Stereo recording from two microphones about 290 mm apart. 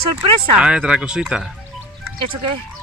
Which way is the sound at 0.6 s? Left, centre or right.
Centre.